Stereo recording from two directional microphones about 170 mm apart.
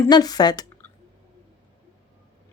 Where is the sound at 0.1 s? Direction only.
25° left (ahead or behind).